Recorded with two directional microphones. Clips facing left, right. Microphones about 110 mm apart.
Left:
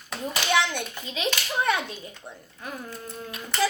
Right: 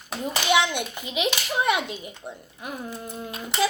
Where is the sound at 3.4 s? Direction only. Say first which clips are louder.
Right 1 dB; 15° right (ahead or behind).